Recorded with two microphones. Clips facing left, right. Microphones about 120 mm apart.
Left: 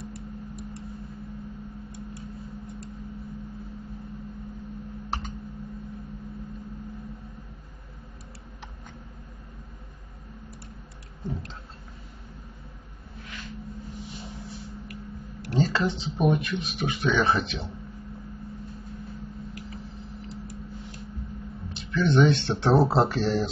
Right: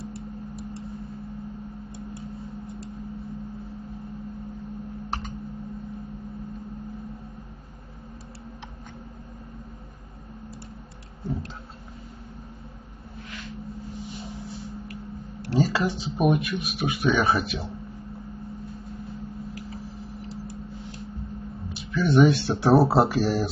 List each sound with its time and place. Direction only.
0.1 s a sound: 30° right (ahead or behind)
15.5 s speech: 10° right (ahead or behind)
21.7 s speech: 5° right (ahead or behind)